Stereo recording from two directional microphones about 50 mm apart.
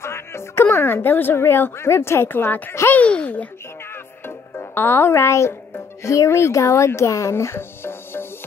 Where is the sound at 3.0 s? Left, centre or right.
Left.